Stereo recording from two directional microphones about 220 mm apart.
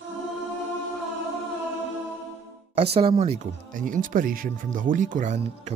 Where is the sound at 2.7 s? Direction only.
25° right (ahead or behind).